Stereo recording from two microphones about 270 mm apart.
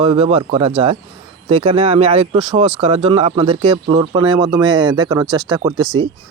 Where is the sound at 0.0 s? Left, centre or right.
Centre.